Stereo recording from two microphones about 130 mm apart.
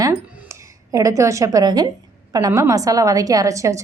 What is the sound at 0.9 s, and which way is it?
A woman's voice, 25° right (ahead or behind).